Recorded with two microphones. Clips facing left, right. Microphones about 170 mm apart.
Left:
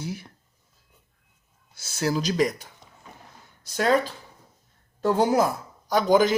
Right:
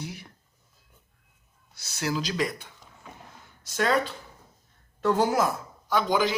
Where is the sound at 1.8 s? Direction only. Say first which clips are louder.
Left 4 dB; 45° left (ahead or behind).